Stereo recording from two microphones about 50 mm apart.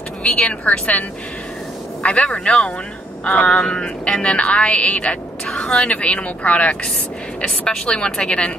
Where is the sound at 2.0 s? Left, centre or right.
Left.